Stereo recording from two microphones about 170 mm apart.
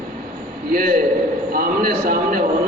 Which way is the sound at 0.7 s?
55° right (ahead or behind).